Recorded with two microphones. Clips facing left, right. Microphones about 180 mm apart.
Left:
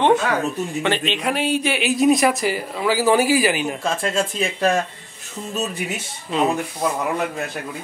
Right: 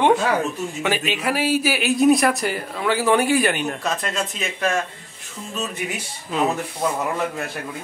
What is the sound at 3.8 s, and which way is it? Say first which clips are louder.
Speech: left 3 dB; 30° left (ahead or behind).